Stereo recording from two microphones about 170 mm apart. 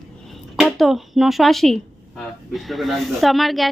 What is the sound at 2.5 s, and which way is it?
A woman's voice, centre (ahead or behind).